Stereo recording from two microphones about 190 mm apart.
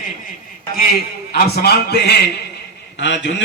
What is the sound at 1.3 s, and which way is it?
Speech, 55° left (ahead or behind).